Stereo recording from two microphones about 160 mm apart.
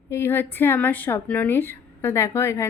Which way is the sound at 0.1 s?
15° left (ahead or behind).